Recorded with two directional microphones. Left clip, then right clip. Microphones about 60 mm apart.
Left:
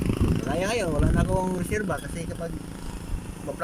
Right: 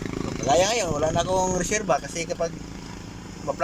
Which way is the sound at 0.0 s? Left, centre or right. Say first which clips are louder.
Left 2 dB; centre.